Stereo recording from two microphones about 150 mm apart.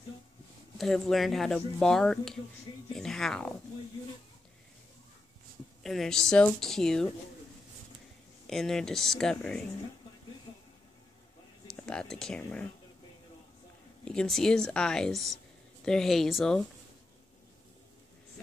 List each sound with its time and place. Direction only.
0.7 s speech: 5° left (ahead or behind)
5.8 s speech: centre (ahead or behind)
8.5 s speech: 5° left (ahead or behind)
11.7 s speech: 5° left (ahead or behind)
14.0 s speech: 5° left (ahead or behind)